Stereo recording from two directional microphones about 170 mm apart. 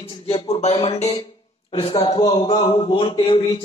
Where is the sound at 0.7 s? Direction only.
35° left (ahead or behind).